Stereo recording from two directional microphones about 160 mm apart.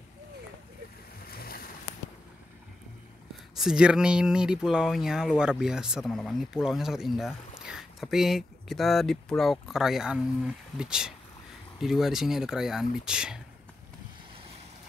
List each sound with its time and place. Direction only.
1.3 s boat: 70° left (ahead or behind)
3.5 s speech: 5° right (ahead or behind)